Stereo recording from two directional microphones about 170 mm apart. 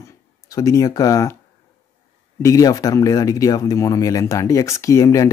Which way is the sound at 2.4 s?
20° left (ahead or behind).